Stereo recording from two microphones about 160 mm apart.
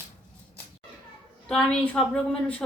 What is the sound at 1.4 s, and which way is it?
Speech, 5° left (ahead or behind).